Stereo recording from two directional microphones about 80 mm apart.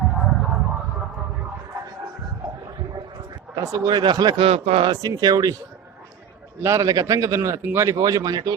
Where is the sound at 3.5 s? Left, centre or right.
Right.